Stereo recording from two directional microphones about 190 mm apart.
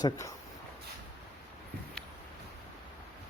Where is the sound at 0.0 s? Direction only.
15° left (ahead or behind).